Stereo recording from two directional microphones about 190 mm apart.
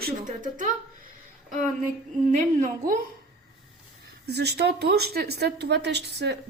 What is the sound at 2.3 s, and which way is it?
Speech, 40° right (ahead or behind).